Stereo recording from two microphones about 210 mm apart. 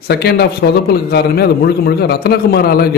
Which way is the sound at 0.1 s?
50° left (ahead or behind).